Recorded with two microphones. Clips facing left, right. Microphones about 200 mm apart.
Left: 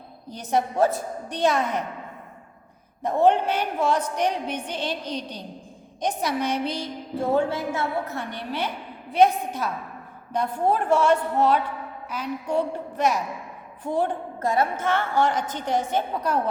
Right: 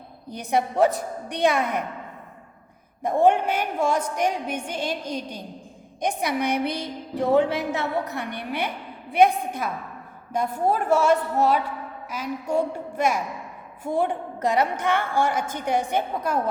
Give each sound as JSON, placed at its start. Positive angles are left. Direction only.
{"t": 0.3, "sound": "a woman's voice", "side_deg": -15}
{"t": 3.2, "sound": "a woman's voice", "side_deg": -10}
{"t": 10.3, "sound": "a woman's voice", "side_deg": -10}